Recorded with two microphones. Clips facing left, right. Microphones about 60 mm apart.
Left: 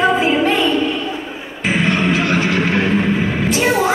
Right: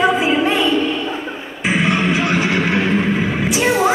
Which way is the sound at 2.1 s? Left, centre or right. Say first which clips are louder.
Left 1 dB; centre.